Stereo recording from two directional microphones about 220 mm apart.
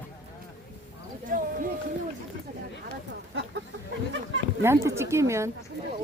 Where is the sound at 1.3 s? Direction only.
35° right (ahead or behind).